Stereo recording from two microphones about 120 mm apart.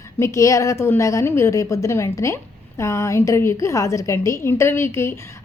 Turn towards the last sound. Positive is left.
turn(degrees=20)  # may be behind; listen again after turning